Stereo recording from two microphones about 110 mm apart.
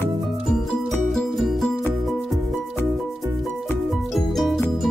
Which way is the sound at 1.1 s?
Centre (ahead or behind).